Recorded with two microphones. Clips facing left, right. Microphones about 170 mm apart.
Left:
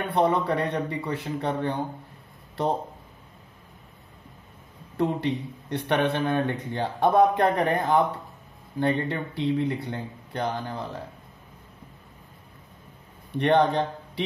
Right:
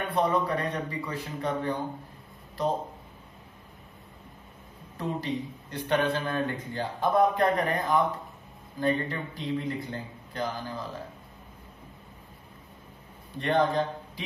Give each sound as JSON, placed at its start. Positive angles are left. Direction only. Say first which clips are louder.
{"t": 0.1, "sound": "a man's voice", "louder": "left 3 dB", "side_deg": 65}
{"t": 4.9, "sound": "speech", "louder": "left 6 dB", "side_deg": 65}
{"t": 13.3, "sound": "a man's voice", "louder": "left 4 dB", "side_deg": 75}